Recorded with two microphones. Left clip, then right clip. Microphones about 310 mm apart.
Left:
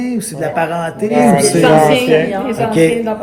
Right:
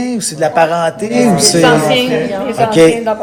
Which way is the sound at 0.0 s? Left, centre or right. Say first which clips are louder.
Right 4 dB; centre.